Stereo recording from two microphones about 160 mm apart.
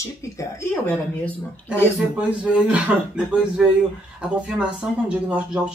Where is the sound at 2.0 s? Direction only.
5° right (ahead or behind).